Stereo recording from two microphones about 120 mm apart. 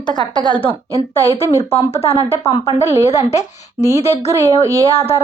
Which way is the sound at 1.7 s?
55° left (ahead or behind).